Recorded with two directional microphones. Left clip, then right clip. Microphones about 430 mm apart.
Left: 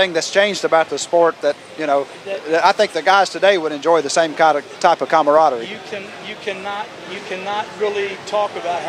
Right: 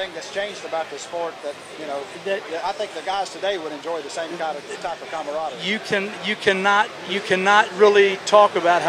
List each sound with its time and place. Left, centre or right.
0.0 s speech: left
2.5 s speech: left
5.7 s speech: right